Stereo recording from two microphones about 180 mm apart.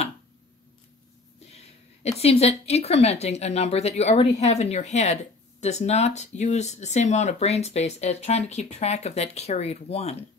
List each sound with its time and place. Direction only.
2.0 s speech: 35° left (ahead or behind)